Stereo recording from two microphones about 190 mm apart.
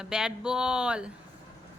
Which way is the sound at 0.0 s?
5° right (ahead or behind).